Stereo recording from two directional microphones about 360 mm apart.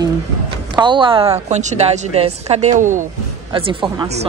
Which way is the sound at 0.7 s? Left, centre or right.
Centre.